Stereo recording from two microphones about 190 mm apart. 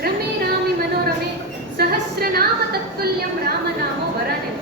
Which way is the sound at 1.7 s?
55° right (ahead or behind).